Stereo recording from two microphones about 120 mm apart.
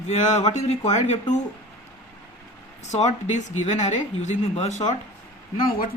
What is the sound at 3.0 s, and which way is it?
Speech, 80° left.